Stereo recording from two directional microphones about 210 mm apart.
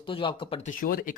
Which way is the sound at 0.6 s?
40° left (ahead or behind).